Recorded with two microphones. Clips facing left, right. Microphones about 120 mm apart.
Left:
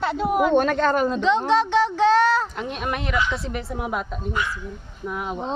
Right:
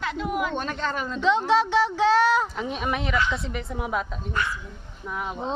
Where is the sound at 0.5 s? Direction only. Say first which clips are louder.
Left 10 dB; 55° left (ahead or behind).